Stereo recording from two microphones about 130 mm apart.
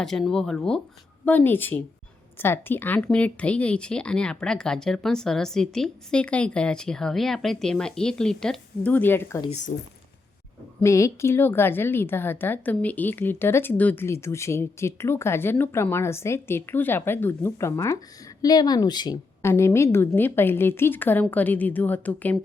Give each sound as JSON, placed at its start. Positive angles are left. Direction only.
{"t": 0.0, "sound": "a woman's voice", "side_deg": 5}
{"t": 9.5, "sound": "speech", "side_deg": 70}
{"t": 10.8, "sound": "a woman's voice", "side_deg": 25}
{"t": 19.4, "sound": "a woman's voice", "side_deg": 20}